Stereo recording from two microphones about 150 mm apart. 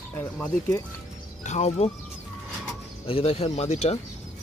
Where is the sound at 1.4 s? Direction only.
50° left (ahead or behind).